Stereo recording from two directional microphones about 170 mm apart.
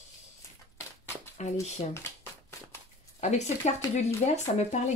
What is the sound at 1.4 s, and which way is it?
Speech, 40° left (ahead or behind).